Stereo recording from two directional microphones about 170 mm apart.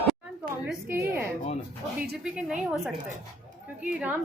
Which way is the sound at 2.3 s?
5° right (ahead or behind).